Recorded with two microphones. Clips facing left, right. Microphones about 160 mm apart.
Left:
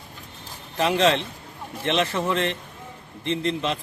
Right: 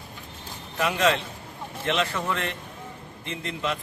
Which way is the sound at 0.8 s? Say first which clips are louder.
Left 3 dB; 25° left (ahead or behind).